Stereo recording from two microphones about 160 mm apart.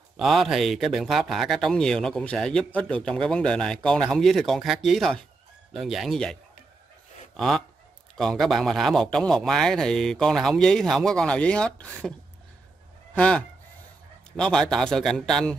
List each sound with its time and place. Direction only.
0.2 s speech: centre (ahead or behind)
7.3 s speech: centre (ahead or behind)
14.3 s speech: 5° left (ahead or behind)